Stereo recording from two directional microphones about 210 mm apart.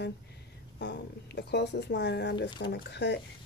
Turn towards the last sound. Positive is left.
turn(degrees=55)  # may be behind; listen again after turning